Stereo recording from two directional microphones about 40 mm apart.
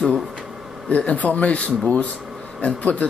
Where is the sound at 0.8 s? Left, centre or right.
Left.